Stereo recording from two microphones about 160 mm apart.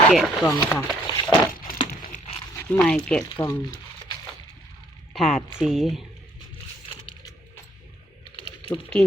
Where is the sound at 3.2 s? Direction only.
25° left (ahead or behind).